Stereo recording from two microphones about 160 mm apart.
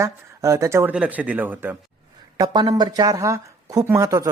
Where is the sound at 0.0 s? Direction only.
20° right (ahead or behind).